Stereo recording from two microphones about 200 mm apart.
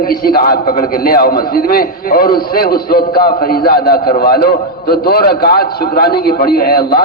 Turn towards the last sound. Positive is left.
turn(degrees=50)  # may be behind; listen again after turning